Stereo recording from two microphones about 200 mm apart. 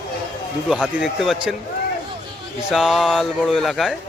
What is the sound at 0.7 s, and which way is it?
Speech, centre (ahead or behind).